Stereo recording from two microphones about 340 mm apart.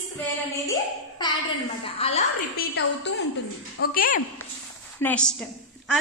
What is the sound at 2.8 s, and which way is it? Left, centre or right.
A woman's voice, left.